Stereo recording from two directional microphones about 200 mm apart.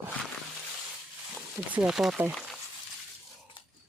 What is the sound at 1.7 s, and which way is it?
Speech, 5° right (ahead or behind).